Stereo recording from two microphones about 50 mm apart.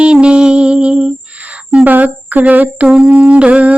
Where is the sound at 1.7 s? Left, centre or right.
Right.